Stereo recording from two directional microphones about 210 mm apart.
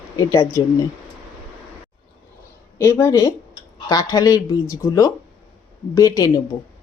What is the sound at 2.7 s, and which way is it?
A woman's voice, 15° left (ahead or behind).